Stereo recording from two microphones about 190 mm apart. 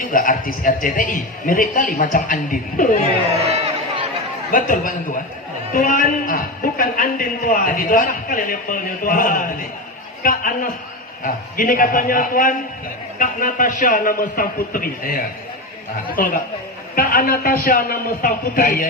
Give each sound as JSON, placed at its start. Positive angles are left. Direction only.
{"t": 0.0, "sound": "a man's voice", "side_deg": 45}
{"t": 3.3, "sound": "music", "side_deg": -30}
{"t": 4.5, "sound": "a man's voice", "side_deg": 45}